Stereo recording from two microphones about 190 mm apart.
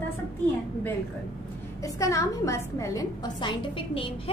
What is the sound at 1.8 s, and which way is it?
A woman's voice, 15° left (ahead or behind).